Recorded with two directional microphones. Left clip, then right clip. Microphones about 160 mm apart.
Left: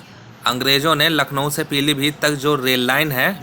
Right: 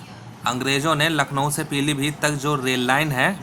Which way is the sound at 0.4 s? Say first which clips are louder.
Left 5 dB; 20° left (ahead or behind).